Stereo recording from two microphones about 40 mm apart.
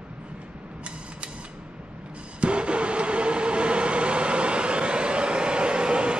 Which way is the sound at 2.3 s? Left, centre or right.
Right.